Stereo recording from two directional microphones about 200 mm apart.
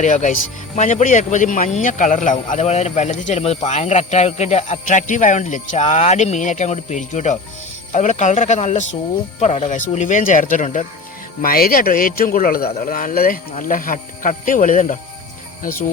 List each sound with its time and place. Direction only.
0.0 s speech: 35° left (ahead or behind)